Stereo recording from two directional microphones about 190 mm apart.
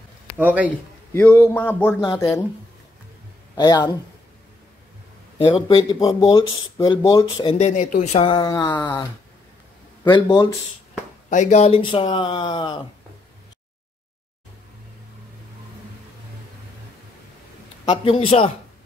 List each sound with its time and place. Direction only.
0.4 s a man's voice: 10° right (ahead or behind)
1.1 s a man's voice: 10° left (ahead or behind)
3.5 s speech: 20° left (ahead or behind)
5.4 s speech: 30° left (ahead or behind)
11.2 s speech: 40° left (ahead or behind); by 12.8 s 25° left (ahead or behind)
17.8 s speech: 30° left (ahead or behind)